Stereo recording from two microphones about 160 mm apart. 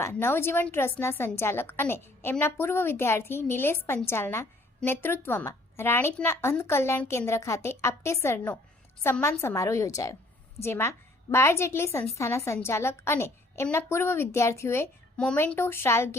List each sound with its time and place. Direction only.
0.0 s a woman's voice: 15° left (ahead or behind)